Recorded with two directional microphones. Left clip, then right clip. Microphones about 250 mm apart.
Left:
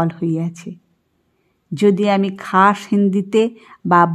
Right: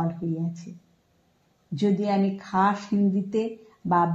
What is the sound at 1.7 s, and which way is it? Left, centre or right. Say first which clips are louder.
A woman's voice: left 10 dB; left.